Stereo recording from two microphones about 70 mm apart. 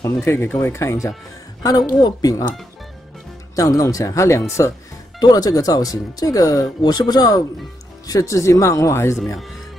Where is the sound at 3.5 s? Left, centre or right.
Left.